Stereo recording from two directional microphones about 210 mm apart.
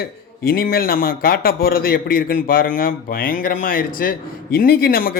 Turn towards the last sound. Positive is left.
turn(degrees=45)  # may be behind; listen again after turning